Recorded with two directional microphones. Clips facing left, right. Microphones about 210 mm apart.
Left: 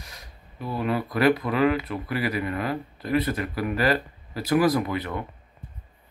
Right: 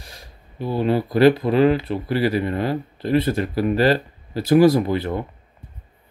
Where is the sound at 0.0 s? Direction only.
30° right (ahead or behind).